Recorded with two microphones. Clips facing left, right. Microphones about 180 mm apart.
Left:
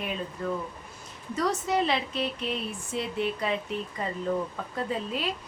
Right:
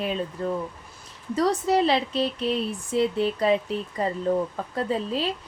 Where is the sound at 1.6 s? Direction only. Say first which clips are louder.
Right 5 dB; 35° right (ahead or behind).